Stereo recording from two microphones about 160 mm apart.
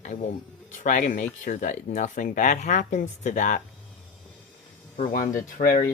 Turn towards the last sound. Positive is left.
turn(degrees=55)  # may be behind; listen again after turning